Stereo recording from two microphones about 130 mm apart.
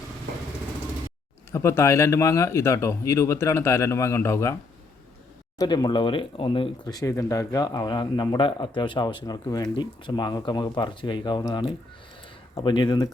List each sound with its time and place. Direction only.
1.5 s speech: 20° left (ahead or behind)
5.5 s speech: 30° left (ahead or behind)
6.8 s speech: 30° left (ahead or behind)